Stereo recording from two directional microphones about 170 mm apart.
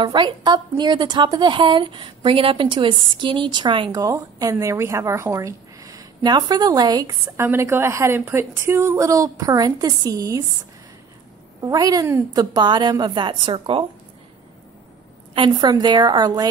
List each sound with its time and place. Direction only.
0.0 s a woman's voice: 30° right (ahead or behind)
11.6 s a woman's voice: 20° right (ahead or behind)
15.3 s a woman's voice: 25° right (ahead or behind)